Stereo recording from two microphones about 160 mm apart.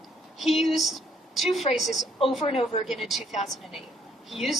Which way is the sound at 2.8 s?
Centre (ahead or behind).